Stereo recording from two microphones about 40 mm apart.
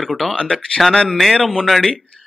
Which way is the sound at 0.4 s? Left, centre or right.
Centre.